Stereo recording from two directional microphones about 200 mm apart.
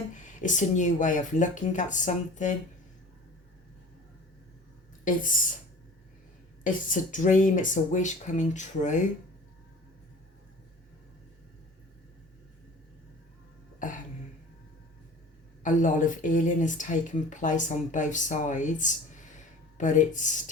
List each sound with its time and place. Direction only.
0.1 s speech: 40° left (ahead or behind)
5.0 s speech: 40° left (ahead or behind)
6.7 s speech: 40° left (ahead or behind)
13.8 s speech: 40° left (ahead or behind)
15.6 s speech: 40° left (ahead or behind)